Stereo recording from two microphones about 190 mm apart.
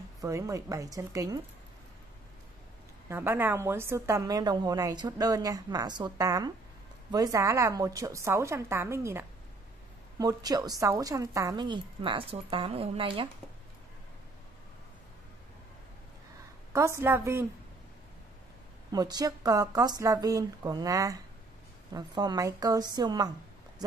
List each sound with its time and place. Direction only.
0.2 s a woman's voice: 15° right (ahead or behind)
3.1 s a woman's voice: 10° right (ahead or behind); by 13.3 s 25° right (ahead or behind)
16.7 s a woman's voice: 15° right (ahead or behind)
18.9 s a woman's voice: 20° right (ahead or behind)